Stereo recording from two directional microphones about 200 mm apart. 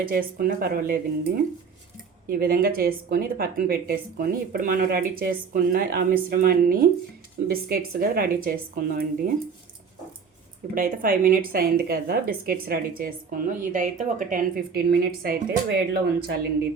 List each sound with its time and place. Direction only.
0.0 s speech: 45° right (ahead or behind)
2.2 s speech: 45° right (ahead or behind)
10.8 s speech: 45° right (ahead or behind)